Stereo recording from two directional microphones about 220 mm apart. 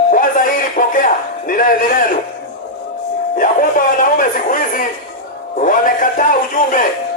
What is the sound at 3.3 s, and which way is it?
Speech, 40° left (ahead or behind).